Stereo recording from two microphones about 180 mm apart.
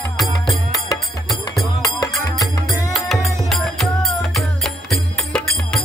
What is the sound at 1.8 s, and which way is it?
Music, 20° left (ahead or behind).